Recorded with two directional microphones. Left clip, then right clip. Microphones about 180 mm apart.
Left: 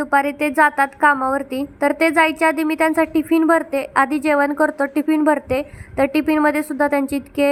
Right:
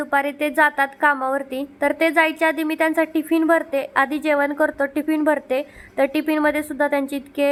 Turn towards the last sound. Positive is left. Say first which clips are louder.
# left 3 dB
turn(degrees=15)  # may be behind; listen again after turning